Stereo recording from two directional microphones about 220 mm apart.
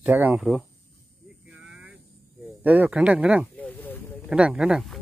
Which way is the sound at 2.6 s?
5° right (ahead or behind).